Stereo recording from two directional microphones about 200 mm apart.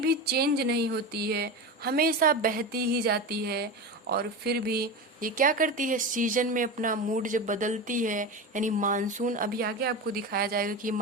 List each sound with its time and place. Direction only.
0.0 s speech: 50° right (ahead or behind)